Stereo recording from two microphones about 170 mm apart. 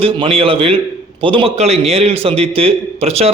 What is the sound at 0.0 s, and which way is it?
A man's voice, 35° right (ahead or behind).